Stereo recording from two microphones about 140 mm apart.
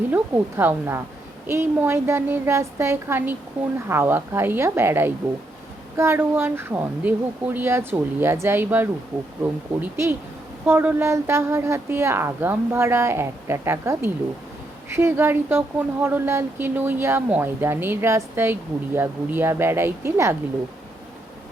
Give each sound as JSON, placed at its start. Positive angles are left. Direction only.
{"t": 0.1, "sound": "a woman's voice", "side_deg": -15}